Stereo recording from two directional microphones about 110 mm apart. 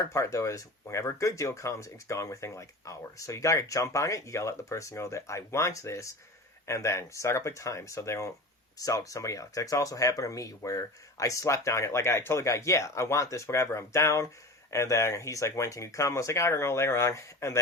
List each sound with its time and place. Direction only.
0.0 s speech: 30° left (ahead or behind)